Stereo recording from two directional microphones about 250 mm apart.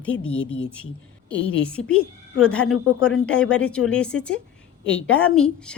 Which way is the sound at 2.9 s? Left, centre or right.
Left.